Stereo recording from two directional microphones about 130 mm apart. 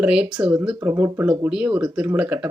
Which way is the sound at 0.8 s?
20° right (ahead or behind).